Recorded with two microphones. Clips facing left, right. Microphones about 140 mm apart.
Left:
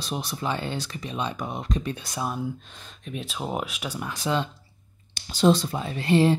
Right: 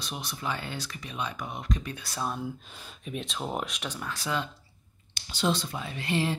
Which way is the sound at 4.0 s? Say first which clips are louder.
Left 6 dB; 15° left (ahead or behind).